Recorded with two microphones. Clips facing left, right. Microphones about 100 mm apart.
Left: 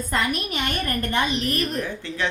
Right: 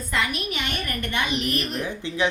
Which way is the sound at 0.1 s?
40° left (ahead or behind).